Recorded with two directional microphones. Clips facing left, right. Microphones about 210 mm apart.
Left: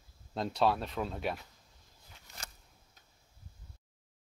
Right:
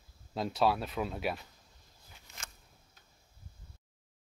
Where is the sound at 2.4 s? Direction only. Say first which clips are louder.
Left 2 dB; 35° left (ahead or behind).